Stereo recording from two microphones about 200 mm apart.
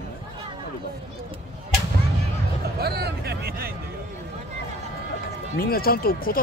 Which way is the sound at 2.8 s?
50° right (ahead or behind).